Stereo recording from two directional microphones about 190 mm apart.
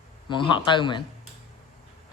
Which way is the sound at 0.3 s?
25° left (ahead or behind).